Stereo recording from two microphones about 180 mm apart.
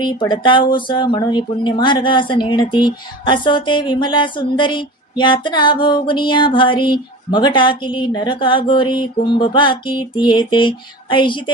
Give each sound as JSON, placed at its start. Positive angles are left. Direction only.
{"t": 0.0, "sound": "speech", "side_deg": 25}